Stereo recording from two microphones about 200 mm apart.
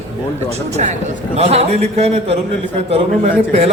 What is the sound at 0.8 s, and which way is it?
Speech, 40° right (ahead or behind).